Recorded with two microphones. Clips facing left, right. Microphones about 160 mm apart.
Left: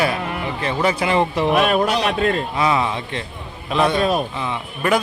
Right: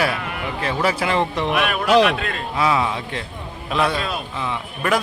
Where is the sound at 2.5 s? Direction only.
Centre (ahead or behind).